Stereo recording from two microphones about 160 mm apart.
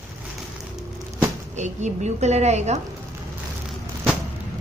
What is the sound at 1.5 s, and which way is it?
A woman's voice, 45° right (ahead or behind).